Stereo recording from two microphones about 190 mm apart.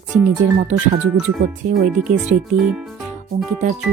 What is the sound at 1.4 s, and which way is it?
Speech, 40° right (ahead or behind).